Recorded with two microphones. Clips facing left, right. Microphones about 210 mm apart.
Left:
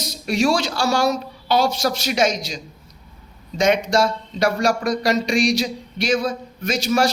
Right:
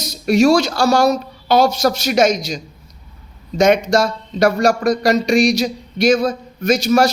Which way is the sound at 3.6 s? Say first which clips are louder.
Right 4 dB; 45° right (ahead or behind).